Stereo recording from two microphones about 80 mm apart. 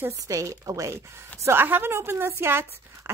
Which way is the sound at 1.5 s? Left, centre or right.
Right.